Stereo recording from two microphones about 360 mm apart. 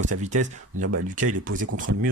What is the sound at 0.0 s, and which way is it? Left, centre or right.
Speech, centre.